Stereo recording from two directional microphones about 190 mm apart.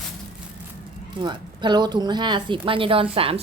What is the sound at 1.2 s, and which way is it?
A woman's voice, 25° right (ahead or behind).